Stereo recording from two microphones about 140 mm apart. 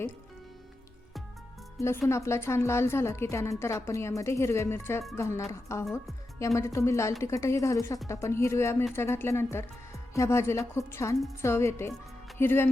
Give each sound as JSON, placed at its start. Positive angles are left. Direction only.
{"t": 1.8, "sound": "a woman's voice", "side_deg": 20}